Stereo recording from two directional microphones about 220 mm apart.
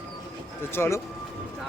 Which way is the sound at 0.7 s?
10° left (ahead or behind).